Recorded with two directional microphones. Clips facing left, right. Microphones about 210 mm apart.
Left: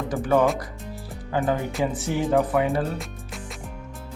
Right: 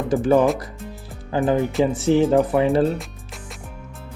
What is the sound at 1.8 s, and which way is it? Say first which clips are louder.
Speech: right 8 dB; 25° right (ahead or behind).